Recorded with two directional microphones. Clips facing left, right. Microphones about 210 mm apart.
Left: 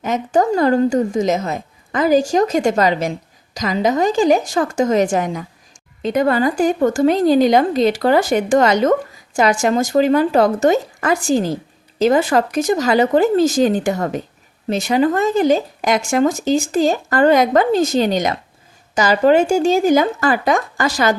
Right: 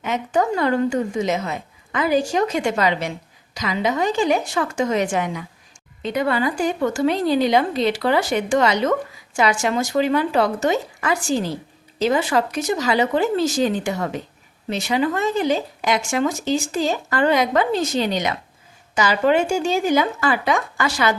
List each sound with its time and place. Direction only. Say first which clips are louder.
0.0 s a woman's voice: left 4 dB; 40° left (ahead or behind)